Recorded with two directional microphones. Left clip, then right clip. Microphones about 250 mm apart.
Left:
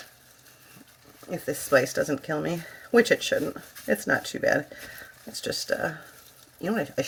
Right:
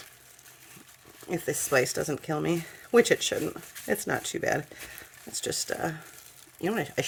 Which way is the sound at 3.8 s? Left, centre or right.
Right.